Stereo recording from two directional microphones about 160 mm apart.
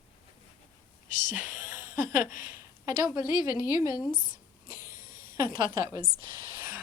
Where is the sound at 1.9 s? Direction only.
55° left (ahead or behind).